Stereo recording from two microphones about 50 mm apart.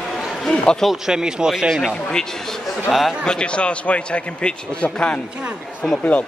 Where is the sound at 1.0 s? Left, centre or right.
Centre.